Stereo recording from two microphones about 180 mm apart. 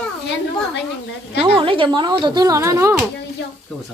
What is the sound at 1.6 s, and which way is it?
Speech, 30° right (ahead or behind).